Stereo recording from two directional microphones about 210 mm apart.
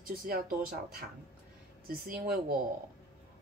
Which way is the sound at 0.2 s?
45° right (ahead or behind).